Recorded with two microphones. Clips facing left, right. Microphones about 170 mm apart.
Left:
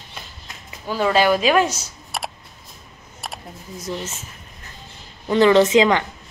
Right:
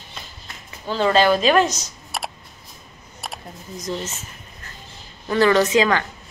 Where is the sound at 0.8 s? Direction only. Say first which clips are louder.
Right 1 dB; 10° left (ahead or behind).